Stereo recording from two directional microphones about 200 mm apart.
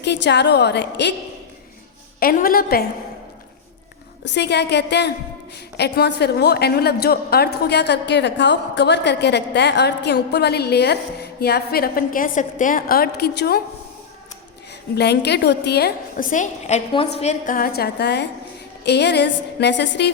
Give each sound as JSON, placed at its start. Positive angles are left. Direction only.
{"t": 0.0, "sound": "a woman's voice", "side_deg": 60}
{"t": 2.1, "sound": "a woman's voice", "side_deg": 45}
{"t": 4.2, "sound": "a woman's voice", "side_deg": 55}
{"t": 14.9, "sound": "a woman's voice", "side_deg": 55}